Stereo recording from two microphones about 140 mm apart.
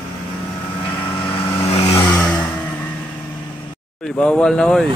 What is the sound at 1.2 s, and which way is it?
Vehicle, 40° left (ahead or behind).